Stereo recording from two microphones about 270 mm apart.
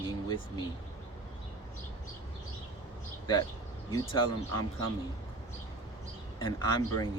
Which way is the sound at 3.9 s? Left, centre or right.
Centre.